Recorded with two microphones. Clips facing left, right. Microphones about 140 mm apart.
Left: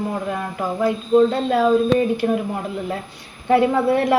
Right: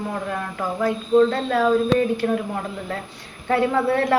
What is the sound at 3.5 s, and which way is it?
Speech, 15° left (ahead or behind).